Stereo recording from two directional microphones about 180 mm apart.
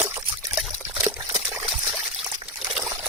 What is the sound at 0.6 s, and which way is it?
Liquid, 10° right (ahead or behind).